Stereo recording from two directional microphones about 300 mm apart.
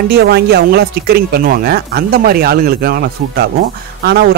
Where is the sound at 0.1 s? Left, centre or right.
Right.